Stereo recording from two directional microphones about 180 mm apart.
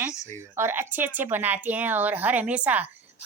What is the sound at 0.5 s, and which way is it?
A woman's voice, 15° right (ahead or behind).